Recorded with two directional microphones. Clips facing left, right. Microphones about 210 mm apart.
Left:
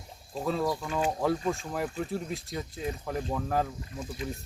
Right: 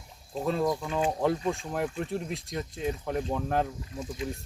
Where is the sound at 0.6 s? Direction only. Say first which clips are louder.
Right 4 dB; 10° right (ahead or behind).